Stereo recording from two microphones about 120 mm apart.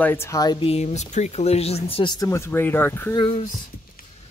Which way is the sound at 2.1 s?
25° left (ahead or behind).